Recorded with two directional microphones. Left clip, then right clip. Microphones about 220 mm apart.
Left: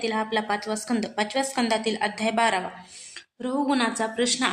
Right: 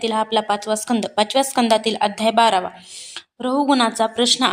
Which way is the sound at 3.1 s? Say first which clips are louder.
Right 8 dB; 30° right (ahead or behind).